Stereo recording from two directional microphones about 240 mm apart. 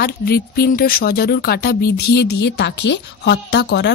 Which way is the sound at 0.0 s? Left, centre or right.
Left.